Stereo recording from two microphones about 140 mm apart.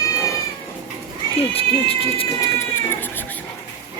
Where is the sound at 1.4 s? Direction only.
45° left (ahead or behind).